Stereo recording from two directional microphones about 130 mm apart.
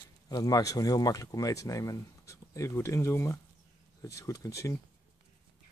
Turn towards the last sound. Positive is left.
turn(degrees=25)  # may be behind; listen again after turning